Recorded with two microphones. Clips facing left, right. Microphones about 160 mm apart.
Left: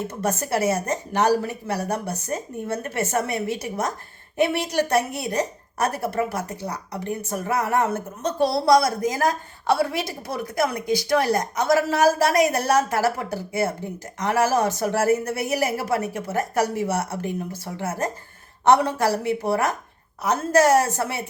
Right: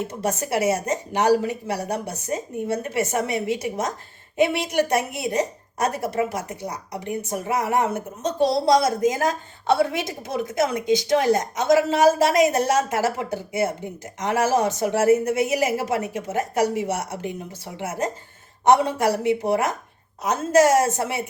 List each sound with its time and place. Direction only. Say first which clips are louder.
0.0 s a woman's voice: even; 15° right (ahead or behind)